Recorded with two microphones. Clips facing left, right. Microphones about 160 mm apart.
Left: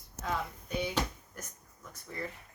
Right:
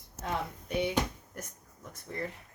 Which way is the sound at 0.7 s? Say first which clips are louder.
Right 4 dB; 25° right (ahead or behind).